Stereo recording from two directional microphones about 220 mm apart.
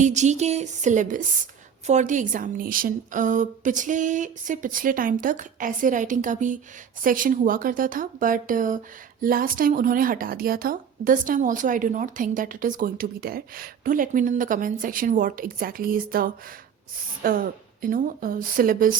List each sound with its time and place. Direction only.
0.0 s a woman's voice: 30° right (ahead or behind)